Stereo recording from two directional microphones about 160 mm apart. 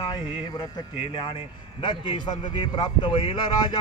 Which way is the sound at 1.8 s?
30° left (ahead or behind).